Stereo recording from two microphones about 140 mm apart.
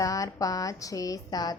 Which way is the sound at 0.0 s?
25° left (ahead or behind).